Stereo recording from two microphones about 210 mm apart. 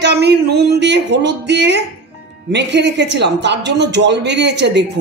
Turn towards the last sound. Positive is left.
turn(degrees=-55)  # may be behind; listen again after turning